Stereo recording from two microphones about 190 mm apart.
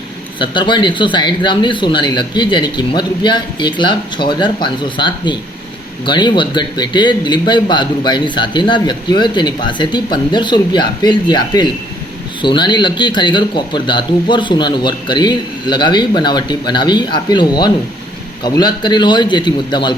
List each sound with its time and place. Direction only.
0.3 s a man's voice: 25° left (ahead or behind)